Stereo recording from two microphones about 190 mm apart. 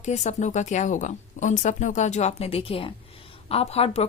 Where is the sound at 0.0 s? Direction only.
40° left (ahead or behind).